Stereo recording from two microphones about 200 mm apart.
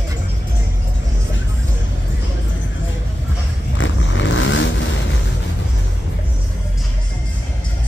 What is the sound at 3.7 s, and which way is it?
Vehicle, 70° left (ahead or behind).